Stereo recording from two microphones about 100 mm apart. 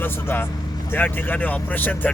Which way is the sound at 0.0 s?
20° left (ahead or behind).